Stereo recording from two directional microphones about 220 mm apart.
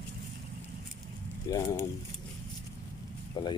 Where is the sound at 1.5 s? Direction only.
15° left (ahead or behind).